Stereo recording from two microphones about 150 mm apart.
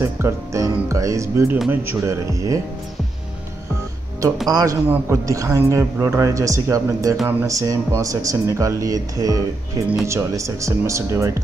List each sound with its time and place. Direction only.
0.0 s speech: 20° right (ahead or behind)
4.5 s speech: 25° right (ahead or behind)